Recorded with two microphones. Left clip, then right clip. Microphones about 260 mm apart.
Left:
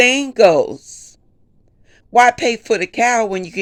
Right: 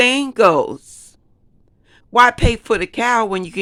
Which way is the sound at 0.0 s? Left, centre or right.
Centre.